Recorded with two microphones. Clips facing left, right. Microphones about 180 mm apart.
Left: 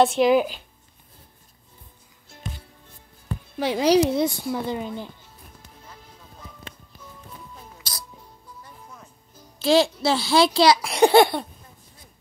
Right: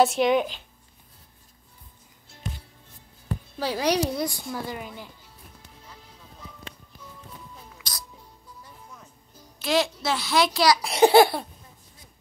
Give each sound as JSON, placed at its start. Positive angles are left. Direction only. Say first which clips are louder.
{"t": 0.0, "sound": "a child's voice", "louder": "left 3 dB", "side_deg": 0}
{"t": 3.5, "sound": "speech", "louder": "left 6 dB", "side_deg": 20}
{"t": 9.6, "sound": "speech", "louder": "left 6 dB", "side_deg": 30}
{"t": 10.8, "sound": "a child's voice", "louder": "left 1 dB", "side_deg": 0}